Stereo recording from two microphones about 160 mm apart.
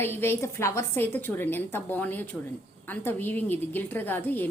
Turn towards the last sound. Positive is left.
turn(degrees=10)  # may be behind; listen again after turning